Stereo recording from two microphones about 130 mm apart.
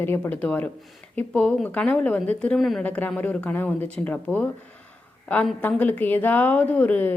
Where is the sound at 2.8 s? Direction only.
15° left (ahead or behind).